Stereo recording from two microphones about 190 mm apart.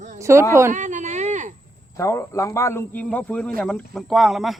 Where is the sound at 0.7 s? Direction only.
40° right (ahead or behind).